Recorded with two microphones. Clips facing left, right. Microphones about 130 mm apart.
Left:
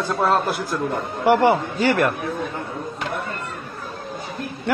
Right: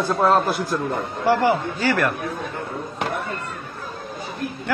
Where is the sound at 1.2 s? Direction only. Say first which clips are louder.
Left 3 dB; 20° left (ahead or behind).